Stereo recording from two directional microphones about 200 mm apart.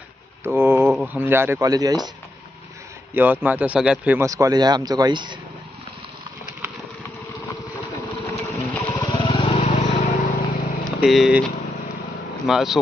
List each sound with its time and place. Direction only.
0.4 s a sound: 10° right (ahead or behind)
0.9 s speech: 10° right (ahead or behind)
3.2 s speech: 10° right (ahead or behind)
8.3 s a sound: 15° left (ahead or behind)
9.2 s vehicle: 25° left (ahead or behind)
11.0 s speech: centre (ahead or behind)